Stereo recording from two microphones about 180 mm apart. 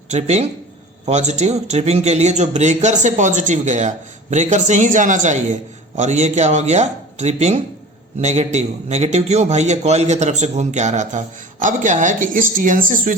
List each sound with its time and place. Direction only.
0.1 s a man's voice: 35° right (ahead or behind)